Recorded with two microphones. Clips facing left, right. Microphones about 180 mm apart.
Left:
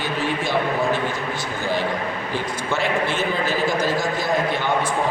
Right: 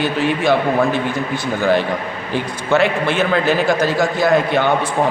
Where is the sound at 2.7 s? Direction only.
70° right (ahead or behind).